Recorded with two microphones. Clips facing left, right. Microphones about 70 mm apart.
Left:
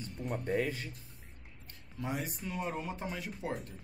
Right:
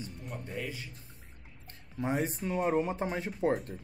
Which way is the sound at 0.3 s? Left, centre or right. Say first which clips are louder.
Left 7 dB; left.